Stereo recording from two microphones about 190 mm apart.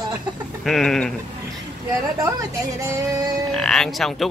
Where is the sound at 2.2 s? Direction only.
15° right (ahead or behind).